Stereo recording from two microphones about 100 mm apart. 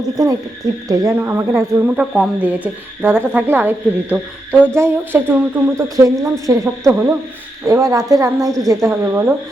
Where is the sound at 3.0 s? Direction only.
20° right (ahead or behind).